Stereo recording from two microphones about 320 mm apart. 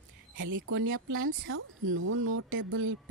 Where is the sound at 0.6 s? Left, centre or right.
Right.